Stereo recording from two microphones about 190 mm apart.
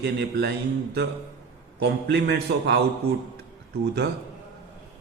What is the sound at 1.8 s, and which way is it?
A man's voice, 60° right (ahead or behind).